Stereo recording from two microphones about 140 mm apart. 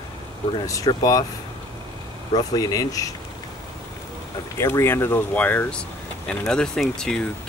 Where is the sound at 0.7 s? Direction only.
25° left (ahead or behind).